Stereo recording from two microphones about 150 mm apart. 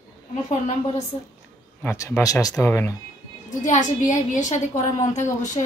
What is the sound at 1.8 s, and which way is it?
Speech, 15° left (ahead or behind).